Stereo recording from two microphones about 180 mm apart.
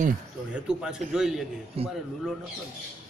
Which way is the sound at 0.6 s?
5° right (ahead or behind).